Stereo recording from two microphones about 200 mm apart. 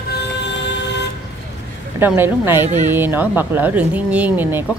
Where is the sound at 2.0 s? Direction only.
10° right (ahead or behind).